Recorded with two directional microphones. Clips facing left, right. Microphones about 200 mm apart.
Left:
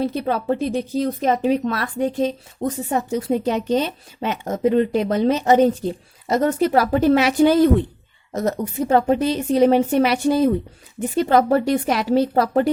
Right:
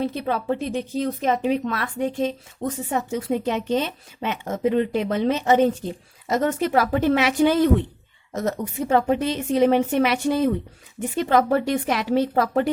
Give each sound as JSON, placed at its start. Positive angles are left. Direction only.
{"t": 0.0, "sound": "speech", "side_deg": 40}